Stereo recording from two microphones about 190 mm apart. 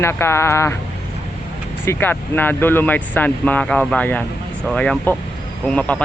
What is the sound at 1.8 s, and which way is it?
A man's voice, 10° left (ahead or behind).